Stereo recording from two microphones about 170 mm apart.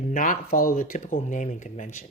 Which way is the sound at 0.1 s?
50° left (ahead or behind).